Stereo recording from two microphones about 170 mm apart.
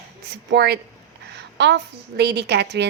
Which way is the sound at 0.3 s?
75° right (ahead or behind).